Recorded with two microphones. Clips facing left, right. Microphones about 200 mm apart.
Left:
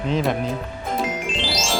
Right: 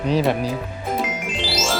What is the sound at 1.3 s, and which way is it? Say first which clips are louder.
Music: right 1 dB; 15° left (ahead or behind).